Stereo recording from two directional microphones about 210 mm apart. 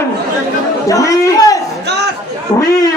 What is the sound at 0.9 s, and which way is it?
Speech, 15° left (ahead or behind).